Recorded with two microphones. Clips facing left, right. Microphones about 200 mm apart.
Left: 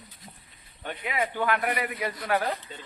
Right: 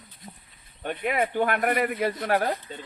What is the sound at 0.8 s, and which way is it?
Speech, 50° right (ahead or behind).